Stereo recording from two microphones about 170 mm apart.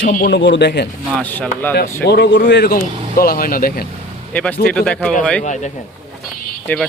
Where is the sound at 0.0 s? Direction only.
75° left (ahead or behind).